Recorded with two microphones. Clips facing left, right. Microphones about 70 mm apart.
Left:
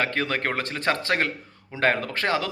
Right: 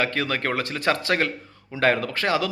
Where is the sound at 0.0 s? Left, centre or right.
Left.